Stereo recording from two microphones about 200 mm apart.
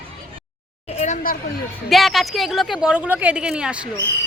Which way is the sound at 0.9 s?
35° left (ahead or behind).